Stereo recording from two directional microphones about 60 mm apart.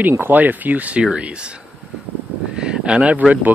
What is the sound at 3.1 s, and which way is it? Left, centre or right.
Speech, right.